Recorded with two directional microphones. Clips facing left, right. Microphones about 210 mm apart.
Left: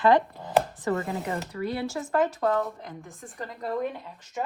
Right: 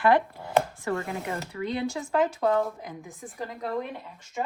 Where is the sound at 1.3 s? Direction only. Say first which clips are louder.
Left 1 dB; centre (ahead or behind).